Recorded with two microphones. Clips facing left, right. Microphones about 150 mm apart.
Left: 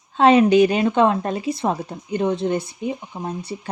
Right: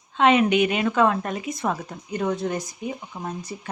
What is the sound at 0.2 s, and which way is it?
Speech, 35° left (ahead or behind).